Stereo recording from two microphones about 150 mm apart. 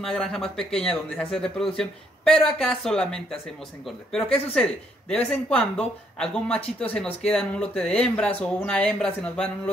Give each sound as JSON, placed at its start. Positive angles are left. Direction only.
{"t": 0.0, "sound": "speech", "side_deg": 5}